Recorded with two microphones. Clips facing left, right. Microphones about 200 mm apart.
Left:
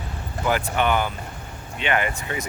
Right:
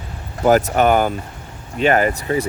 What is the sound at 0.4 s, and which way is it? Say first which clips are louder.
Speech: right 9 dB; 45° right (ahead or behind).